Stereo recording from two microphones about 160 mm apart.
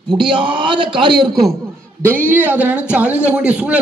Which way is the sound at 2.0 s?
15° right (ahead or behind).